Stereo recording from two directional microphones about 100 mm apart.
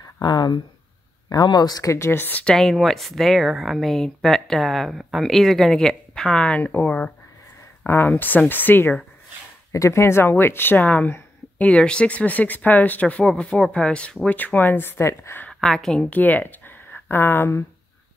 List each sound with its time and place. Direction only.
0.2 s speech: 45° left (ahead or behind)
1.9 s speech: 25° left (ahead or behind)
2.4 s speech: 5° left (ahead or behind); by 8.9 s 20° left (ahead or behind)
9.7 s speech: 30° left (ahead or behind)
15.6 s speech: 5° left (ahead or behind)
16.2 s speech: 15° left (ahead or behind)